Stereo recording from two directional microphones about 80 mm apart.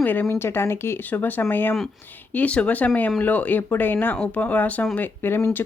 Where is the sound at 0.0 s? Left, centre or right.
Left.